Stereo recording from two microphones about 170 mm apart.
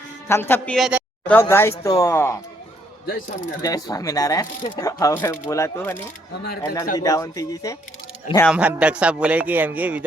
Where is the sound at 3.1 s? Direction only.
50° left (ahead or behind).